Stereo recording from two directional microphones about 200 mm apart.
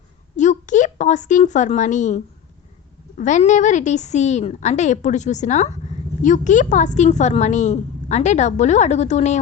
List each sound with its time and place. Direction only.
0.3 s a woman's voice: 40° left (ahead or behind)